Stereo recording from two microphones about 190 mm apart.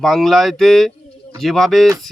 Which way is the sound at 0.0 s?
Centre (ahead or behind).